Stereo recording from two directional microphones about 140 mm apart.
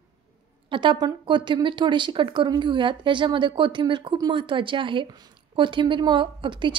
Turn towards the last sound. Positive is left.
turn(degrees=-35)  # may be behind; listen again after turning